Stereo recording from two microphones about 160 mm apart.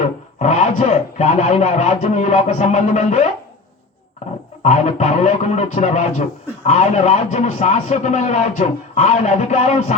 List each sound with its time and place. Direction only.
0.0 s speech: 45° left (ahead or behind)
4.6 s speech: 45° left (ahead or behind)